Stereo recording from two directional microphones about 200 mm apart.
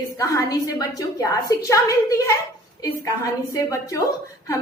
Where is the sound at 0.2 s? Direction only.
15° left (ahead or behind).